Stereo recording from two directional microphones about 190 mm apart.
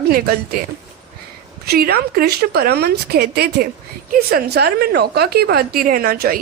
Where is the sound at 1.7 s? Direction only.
55° right (ahead or behind).